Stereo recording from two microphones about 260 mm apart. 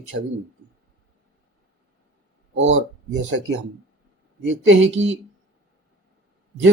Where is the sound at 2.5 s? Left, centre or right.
Right.